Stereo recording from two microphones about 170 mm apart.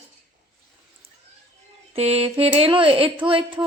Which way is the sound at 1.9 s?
35° right (ahead or behind).